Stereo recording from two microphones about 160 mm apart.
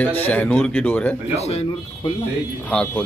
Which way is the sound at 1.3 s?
40° left (ahead or behind).